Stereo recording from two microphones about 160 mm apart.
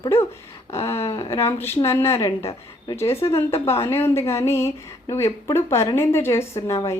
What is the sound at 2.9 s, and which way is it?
A woman's voice, 15° left (ahead or behind).